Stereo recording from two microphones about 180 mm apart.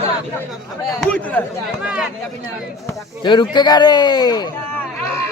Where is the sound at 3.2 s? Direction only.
25° left (ahead or behind).